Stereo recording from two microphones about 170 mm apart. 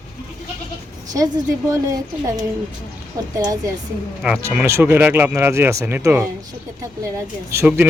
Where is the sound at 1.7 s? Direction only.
20° right (ahead or behind).